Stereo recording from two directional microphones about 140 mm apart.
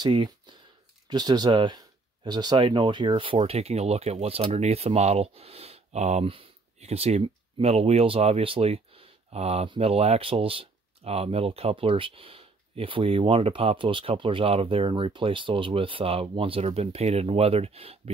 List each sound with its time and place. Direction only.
0.0 s speech: 30° right (ahead or behind)